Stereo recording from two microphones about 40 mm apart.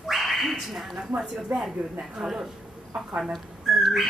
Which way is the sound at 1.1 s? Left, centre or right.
Centre.